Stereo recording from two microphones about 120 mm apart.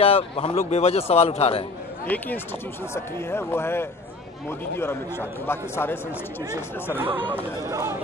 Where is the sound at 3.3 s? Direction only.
20° left (ahead or behind).